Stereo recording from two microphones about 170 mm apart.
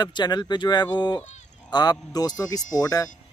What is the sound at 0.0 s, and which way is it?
Speech, 25° left (ahead or behind).